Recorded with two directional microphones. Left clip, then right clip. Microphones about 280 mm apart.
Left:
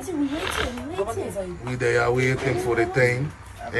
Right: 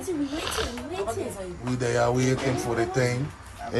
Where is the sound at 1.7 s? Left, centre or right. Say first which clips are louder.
Left 3 dB; centre.